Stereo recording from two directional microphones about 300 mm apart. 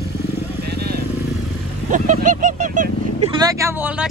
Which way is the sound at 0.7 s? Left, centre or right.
Right.